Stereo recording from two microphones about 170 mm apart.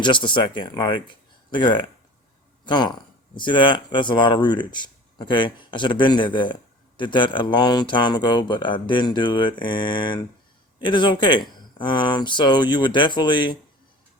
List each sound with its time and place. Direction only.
0.0 s speech: 30° left (ahead or behind)